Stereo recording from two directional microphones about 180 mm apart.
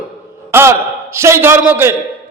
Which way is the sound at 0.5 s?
15° right (ahead or behind).